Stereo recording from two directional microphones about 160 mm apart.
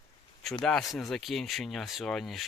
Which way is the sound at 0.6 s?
Centre (ahead or behind).